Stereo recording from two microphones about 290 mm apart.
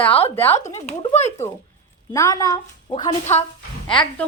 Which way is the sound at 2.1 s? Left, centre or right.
Centre.